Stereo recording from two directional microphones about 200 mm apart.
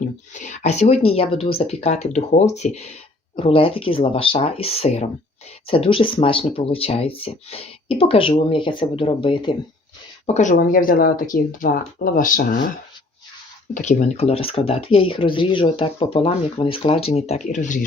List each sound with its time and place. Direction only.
0.3 s speech: 35° left (ahead or behind)
10.2 s speech: 35° left (ahead or behind)
13.7 s speech: 35° left (ahead or behind)